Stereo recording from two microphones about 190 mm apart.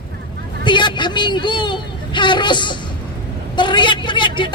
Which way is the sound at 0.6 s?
25° left (ahead or behind).